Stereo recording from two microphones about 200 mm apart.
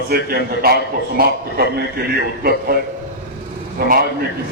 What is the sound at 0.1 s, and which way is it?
A man's voice, 50° right (ahead or behind).